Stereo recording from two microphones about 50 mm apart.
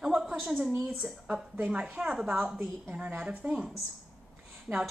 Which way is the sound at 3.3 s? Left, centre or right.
Right.